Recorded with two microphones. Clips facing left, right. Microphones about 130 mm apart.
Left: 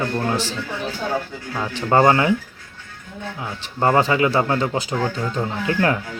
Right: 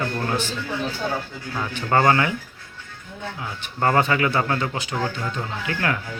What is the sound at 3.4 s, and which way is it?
Speech, 20° left (ahead or behind).